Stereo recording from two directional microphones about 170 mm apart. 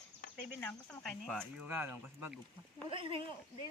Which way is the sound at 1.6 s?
10° right (ahead or behind).